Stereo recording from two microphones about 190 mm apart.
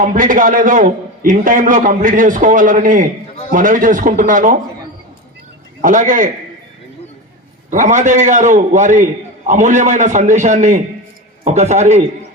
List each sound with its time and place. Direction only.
0.0 s a man's voice: 45° right (ahead or behind)
5.8 s a man's voice: 40° right (ahead or behind)
7.7 s a man's voice: 40° right (ahead or behind)